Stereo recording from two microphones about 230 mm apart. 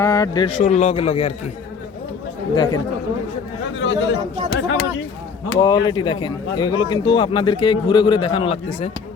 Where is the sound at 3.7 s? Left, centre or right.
Left.